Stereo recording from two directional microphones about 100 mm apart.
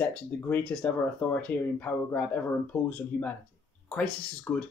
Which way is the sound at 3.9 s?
10° left (ahead or behind).